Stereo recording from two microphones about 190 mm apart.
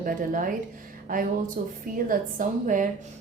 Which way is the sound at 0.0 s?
45° right (ahead or behind).